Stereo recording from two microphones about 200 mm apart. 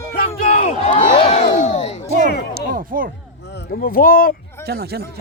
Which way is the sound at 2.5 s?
45° right (ahead or behind).